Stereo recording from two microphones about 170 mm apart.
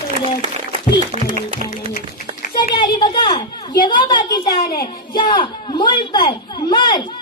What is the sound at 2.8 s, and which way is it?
A child's voice, 25° left (ahead or behind).